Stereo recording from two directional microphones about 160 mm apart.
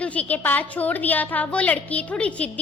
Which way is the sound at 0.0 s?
10° left (ahead or behind).